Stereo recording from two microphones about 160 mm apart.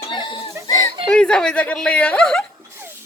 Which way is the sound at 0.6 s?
20° left (ahead or behind).